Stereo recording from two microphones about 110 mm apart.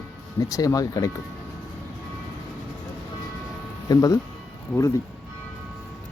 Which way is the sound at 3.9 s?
35° left (ahead or behind).